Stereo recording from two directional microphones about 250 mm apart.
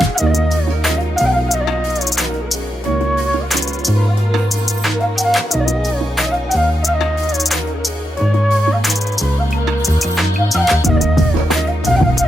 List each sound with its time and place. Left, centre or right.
0.2 s music: centre
4.8 s music: centre
9.6 s music: centre